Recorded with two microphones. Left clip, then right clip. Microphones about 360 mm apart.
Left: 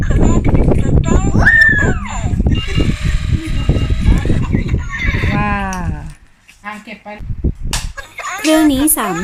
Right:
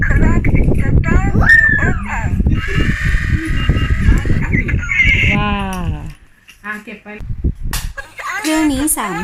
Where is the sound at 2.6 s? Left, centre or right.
Centre.